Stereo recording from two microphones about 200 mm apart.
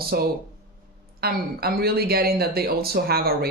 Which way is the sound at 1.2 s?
50° right (ahead or behind).